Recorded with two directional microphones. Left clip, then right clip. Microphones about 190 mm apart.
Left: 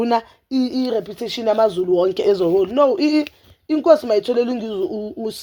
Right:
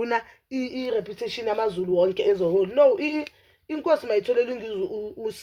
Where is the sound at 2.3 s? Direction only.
55° left (ahead or behind).